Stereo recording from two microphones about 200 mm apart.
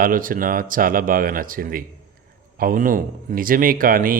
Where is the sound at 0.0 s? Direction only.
45° right (ahead or behind).